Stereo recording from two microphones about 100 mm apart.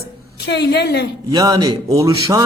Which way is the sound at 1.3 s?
40° right (ahead or behind).